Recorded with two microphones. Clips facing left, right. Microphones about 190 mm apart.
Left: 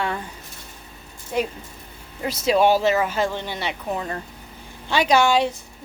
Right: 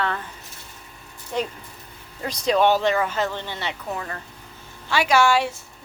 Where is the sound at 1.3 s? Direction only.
10° left (ahead or behind).